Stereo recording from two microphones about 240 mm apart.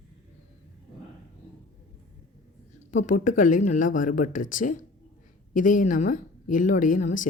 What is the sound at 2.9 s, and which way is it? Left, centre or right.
Speech, left.